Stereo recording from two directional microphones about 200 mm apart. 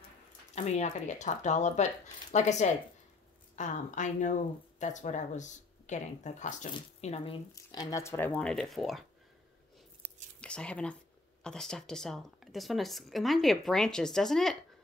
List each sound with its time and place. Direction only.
0.6 s speech: 35° left (ahead or behind)
7.5 s speech: 20° left (ahead or behind); by 9.0 s centre (ahead or behind)
10.4 s speech: 5° left (ahead or behind)